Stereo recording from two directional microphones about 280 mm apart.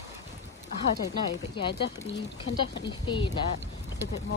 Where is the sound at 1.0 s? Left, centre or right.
Centre.